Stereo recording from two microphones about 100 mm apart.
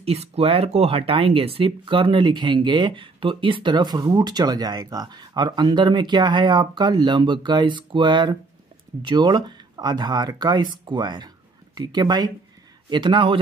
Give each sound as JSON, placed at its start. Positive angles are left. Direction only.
{"t": 0.0, "sound": "speech", "side_deg": -90}